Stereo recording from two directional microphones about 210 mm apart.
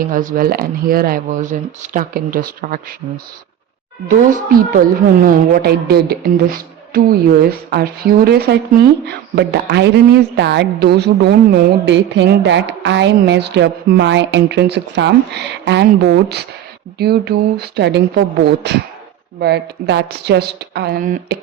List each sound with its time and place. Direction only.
0.0 s a woman's voice: 40° right (ahead or behind)
4.1 s a woman's voice: 40° right (ahead or behind)
17.0 s a woman's voice: 50° right (ahead or behind)